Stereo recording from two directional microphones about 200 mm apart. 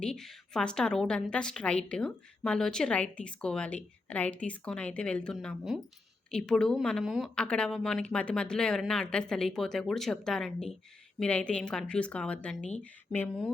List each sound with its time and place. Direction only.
0.0 s a woman's voice: 5° left (ahead or behind)